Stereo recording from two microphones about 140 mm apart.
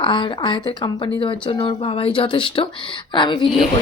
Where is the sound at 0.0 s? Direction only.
35° left (ahead or behind).